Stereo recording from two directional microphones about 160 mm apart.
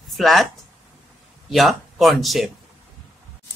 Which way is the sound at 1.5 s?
Centre (ahead or behind).